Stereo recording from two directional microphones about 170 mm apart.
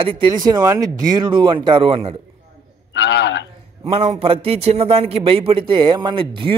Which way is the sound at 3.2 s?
90° left.